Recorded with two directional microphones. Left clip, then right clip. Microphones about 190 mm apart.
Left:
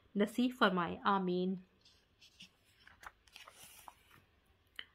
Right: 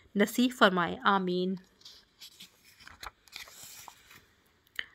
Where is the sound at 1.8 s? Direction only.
15° right (ahead or behind).